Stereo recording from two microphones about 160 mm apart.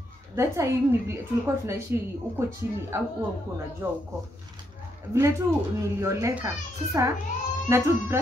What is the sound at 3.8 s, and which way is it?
Speech, 15° right (ahead or behind).